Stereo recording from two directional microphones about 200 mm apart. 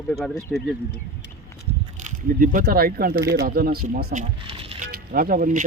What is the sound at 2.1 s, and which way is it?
Speech, 40° right (ahead or behind).